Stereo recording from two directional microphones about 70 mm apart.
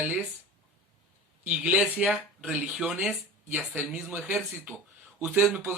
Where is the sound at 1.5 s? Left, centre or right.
Centre.